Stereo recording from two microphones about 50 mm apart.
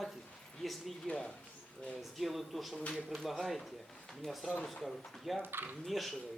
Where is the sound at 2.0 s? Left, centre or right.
Centre.